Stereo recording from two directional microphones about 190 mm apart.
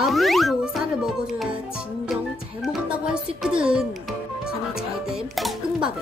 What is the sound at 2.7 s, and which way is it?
Speech, 5° right (ahead or behind).